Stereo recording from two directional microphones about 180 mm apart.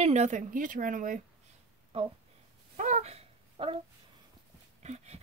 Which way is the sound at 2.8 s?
40° right (ahead or behind).